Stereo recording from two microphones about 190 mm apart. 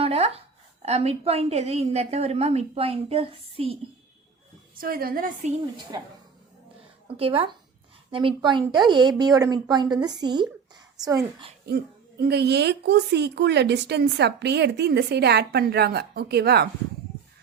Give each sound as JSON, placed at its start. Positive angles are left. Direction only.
{"t": 0.0, "sound": "a woman's voice", "side_deg": -30}
{"t": 4.8, "sound": "a woman's voice", "side_deg": -50}
{"t": 5.9, "sound": "a woman's voice", "side_deg": -20}
{"t": 7.2, "sound": "a woman's voice", "side_deg": -30}
{"t": 11.6, "sound": "a woman's voice", "side_deg": -55}